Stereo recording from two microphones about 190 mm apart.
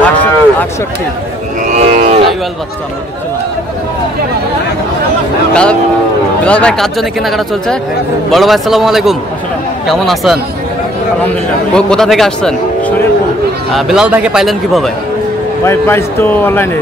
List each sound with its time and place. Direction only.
0.0 s a sound: 5° left (ahead or behind)
1.7 s livestock: 45° right (ahead or behind)
5.5 s speech: 5° left (ahead or behind)
11.7 s speech: 5° left (ahead or behind)
15.6 s speech: 15° left (ahead or behind)